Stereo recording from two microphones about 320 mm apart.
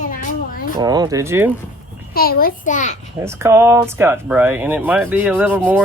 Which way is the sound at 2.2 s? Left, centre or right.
Left.